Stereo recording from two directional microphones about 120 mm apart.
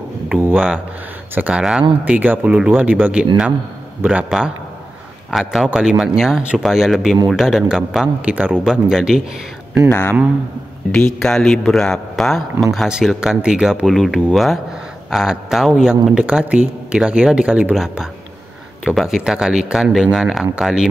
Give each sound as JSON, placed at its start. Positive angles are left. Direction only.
{"t": 1.3, "sound": "speech", "side_deg": -10}
{"t": 9.8, "sound": "speech", "side_deg": 20}
{"t": 10.9, "sound": "speech", "side_deg": 5}